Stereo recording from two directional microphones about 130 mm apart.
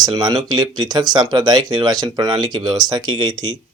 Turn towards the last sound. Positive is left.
turn(degrees=-35)  # may be behind; listen again after turning